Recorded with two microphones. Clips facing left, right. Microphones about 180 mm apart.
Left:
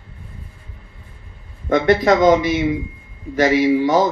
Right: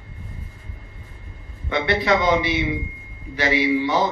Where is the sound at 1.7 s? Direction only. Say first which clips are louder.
Left 6 dB; 45° left (ahead or behind).